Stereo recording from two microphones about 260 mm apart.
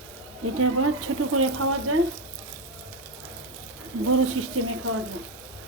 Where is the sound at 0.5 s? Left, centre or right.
Right.